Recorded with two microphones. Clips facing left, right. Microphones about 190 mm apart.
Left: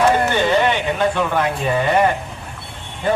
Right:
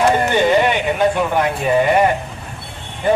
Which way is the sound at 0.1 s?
15° right (ahead or behind).